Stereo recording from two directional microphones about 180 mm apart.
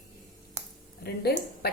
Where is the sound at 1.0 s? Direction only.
60° left (ahead or behind).